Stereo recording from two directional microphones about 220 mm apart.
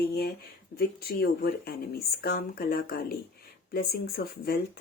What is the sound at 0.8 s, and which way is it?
Speech, 45° left (ahead or behind).